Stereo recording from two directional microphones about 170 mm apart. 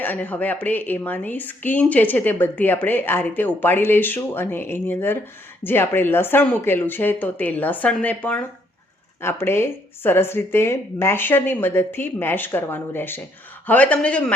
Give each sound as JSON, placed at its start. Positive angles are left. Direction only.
{"t": 0.0, "sound": "speech", "side_deg": 10}